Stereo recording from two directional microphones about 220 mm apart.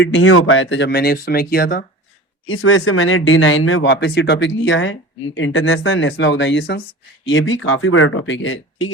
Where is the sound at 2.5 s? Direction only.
65° left (ahead or behind).